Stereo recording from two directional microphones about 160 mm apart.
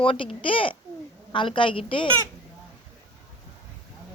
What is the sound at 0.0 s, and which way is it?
A child's voice, 35° left (ahead or behind).